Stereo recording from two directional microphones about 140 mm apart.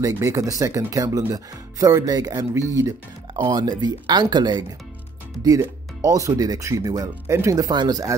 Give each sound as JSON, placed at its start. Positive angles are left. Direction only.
{"t": 0.0, "sound": "speech", "side_deg": -20}